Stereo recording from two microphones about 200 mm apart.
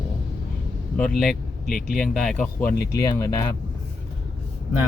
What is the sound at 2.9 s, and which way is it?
Speech, 15° left (ahead or behind).